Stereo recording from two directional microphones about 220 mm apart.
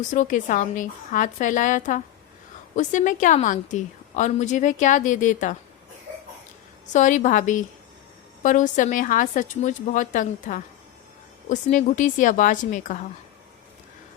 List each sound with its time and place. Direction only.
0.1 s a woman's voice: 35° left (ahead or behind)
6.9 s a woman's voice: 35° left (ahead or behind)